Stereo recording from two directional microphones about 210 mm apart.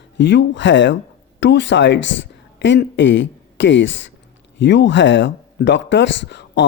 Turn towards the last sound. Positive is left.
turn(degrees=55)  # may be behind; listen again after turning